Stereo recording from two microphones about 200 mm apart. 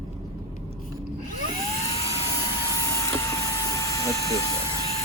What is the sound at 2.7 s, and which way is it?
Vehicle, 15° left (ahead or behind).